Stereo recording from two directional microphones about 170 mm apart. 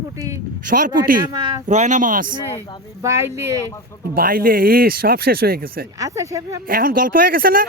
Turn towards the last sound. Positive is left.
turn(degrees=-55)  # may be behind; listen again after turning